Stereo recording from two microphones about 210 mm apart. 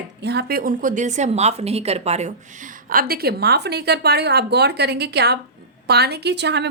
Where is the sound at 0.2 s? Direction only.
50° right (ahead or behind); by 2.3 s 30° right (ahead or behind).